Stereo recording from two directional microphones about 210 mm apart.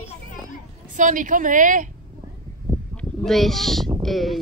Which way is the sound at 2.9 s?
Centre (ahead or behind).